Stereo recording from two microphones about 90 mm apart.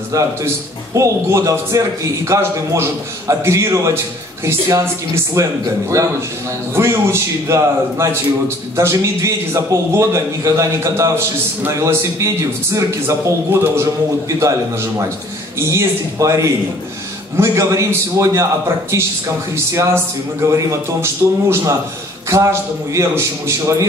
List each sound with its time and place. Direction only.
0.1 s a man's voice: 35° right (ahead or behind)
5.1 s a man's voice: 35° right (ahead or behind)
15.6 s a man's voice: 30° right (ahead or behind)